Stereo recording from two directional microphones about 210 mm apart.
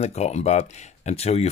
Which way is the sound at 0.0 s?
30° left (ahead or behind).